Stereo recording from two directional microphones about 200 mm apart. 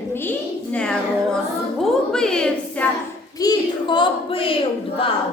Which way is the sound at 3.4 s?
20° left (ahead or behind).